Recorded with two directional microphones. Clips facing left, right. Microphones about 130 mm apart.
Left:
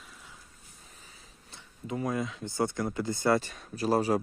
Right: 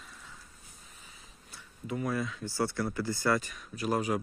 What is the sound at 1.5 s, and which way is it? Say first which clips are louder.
Speech: left 1 dB; 25° left (ahead or behind).